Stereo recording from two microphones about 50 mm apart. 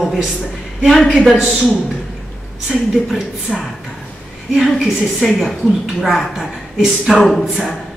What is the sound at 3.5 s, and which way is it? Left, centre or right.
Speech, left.